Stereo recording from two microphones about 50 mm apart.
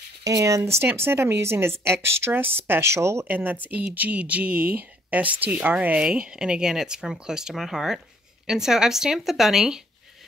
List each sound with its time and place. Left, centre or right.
0.4 s speech: right
0.8 s a woman's voice: right
2.9 s speech: right
3.3 s speech: right
6.0 s speech: centre